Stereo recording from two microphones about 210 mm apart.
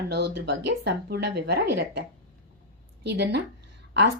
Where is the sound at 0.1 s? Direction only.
55° right (ahead or behind).